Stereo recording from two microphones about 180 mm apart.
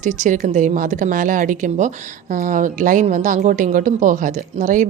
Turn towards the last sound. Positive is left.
turn(degrees=-45)  # may be behind; listen again after turning